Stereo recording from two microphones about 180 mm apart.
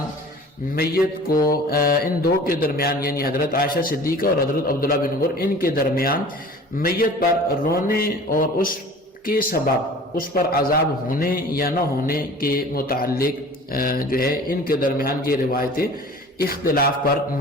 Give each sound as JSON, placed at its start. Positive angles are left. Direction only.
{"t": 0.8, "sound": "a man's voice", "side_deg": 55}